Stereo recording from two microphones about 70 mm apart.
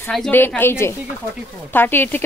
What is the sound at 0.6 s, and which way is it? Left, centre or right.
A woman's voice, left.